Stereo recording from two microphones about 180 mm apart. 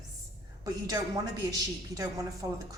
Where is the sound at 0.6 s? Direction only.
20° right (ahead or behind).